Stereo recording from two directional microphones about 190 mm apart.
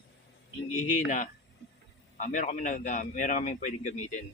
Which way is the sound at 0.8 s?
40° left (ahead or behind).